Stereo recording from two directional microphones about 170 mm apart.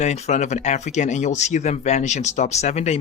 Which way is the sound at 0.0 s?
40° left (ahead or behind).